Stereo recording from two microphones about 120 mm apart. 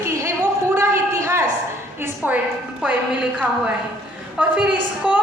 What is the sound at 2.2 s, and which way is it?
Speech, 15° right (ahead or behind).